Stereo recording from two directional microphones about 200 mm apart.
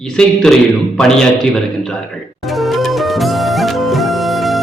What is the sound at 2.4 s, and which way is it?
Music, centre (ahead or behind).